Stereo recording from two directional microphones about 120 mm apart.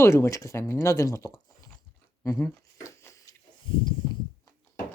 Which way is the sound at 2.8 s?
25° left (ahead or behind).